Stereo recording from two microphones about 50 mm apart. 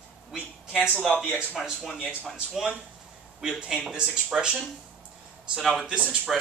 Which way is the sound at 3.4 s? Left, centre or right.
Centre.